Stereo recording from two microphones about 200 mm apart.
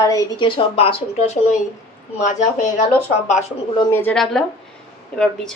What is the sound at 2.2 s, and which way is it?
Speech, 40° left (ahead or behind).